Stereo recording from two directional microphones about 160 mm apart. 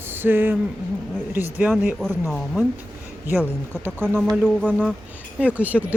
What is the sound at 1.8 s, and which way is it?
Speech, 10° right (ahead or behind).